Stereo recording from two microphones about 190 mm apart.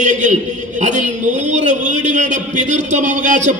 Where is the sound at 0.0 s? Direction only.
40° right (ahead or behind).